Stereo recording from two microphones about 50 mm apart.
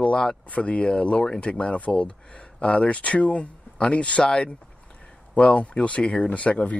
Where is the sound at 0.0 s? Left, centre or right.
Centre.